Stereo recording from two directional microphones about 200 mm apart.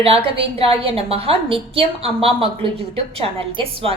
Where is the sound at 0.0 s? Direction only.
30° right (ahead or behind).